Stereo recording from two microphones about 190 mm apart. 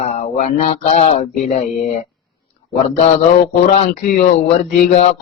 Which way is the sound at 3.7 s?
35° left (ahead or behind).